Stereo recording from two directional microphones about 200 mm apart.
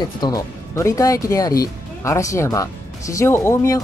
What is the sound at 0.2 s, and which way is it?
Speech, 15° left (ahead or behind).